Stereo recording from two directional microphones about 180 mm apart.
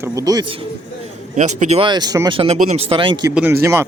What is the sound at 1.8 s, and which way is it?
Speech, 25° right (ahead or behind).